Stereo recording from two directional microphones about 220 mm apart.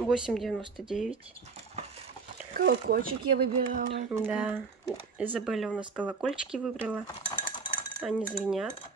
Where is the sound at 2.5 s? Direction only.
45° right (ahead or behind).